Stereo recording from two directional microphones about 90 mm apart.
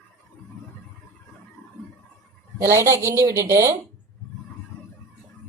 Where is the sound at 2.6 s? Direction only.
30° right (ahead or behind).